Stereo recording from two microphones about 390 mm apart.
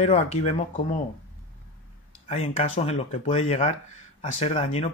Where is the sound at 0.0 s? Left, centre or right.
Centre.